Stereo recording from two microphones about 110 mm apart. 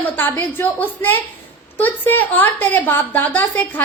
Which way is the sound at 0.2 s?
15° left (ahead or behind).